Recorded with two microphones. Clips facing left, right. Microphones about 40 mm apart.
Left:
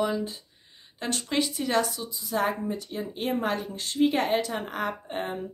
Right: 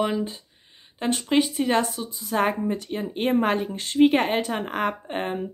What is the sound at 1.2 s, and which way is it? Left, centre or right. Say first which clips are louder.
A woman's voice: right 6 dB; right.